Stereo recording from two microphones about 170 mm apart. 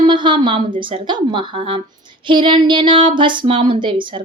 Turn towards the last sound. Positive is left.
turn(degrees=-30)  # may be behind; listen again after turning